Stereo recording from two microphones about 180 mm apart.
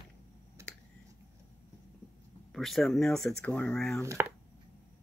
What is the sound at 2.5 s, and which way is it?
Speech, centre (ahead or behind).